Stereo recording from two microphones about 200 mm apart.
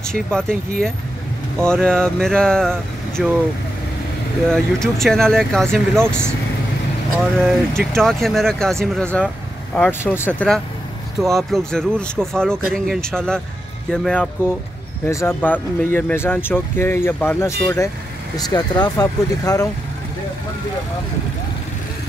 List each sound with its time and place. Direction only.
0.1 s speech: 5° left (ahead or behind)
4.5 s speech: centre (ahead or behind)